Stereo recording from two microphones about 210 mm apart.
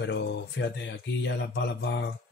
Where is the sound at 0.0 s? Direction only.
55° left (ahead or behind).